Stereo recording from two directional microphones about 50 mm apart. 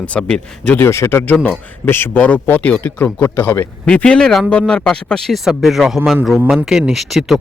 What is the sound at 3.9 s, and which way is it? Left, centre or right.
Speech, centre.